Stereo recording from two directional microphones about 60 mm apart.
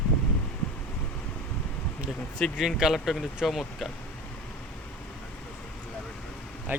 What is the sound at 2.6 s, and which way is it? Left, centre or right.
Speech, centre.